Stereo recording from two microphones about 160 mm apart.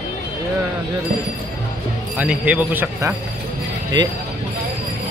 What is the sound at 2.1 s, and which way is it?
Speech, 10° right (ahead or behind).